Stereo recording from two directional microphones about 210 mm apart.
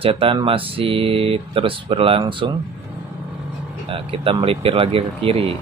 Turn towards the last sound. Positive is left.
turn(degrees=-25)  # may be behind; listen again after turning